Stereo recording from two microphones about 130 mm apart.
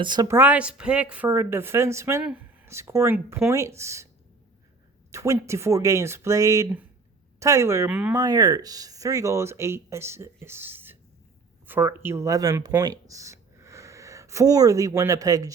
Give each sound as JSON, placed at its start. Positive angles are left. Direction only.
{"t": 0.0, "sound": "a woman's voice", "side_deg": -35}
{"t": 0.3, "sound": "a woman's voice", "side_deg": -15}
{"t": 5.1, "sound": "speech", "side_deg": -25}
{"t": 7.9, "sound": "a woman's voice", "side_deg": -10}
{"t": 8.1, "sound": "speech", "side_deg": -30}